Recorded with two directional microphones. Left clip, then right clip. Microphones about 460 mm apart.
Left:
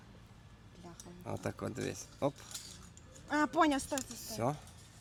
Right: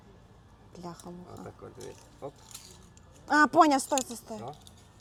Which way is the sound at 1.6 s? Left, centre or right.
Left.